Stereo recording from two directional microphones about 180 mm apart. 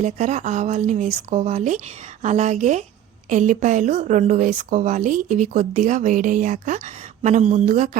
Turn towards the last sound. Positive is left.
turn(degrees=-45)  # may be behind; listen again after turning